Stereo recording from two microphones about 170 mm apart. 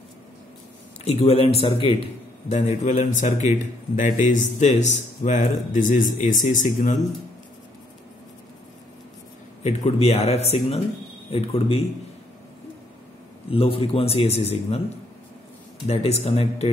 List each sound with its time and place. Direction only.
1.0 s a man's voice: 35° left (ahead or behind)
9.6 s a man's voice: 40° left (ahead or behind)
13.5 s a man's voice: 35° left (ahead or behind)
15.9 s a man's voice: 35° left (ahead or behind)